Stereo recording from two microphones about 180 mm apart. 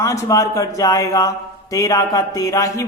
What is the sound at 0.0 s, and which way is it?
Speech, 15° left (ahead or behind).